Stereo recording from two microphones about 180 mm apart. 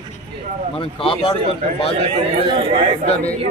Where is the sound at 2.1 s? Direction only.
30° right (ahead or behind).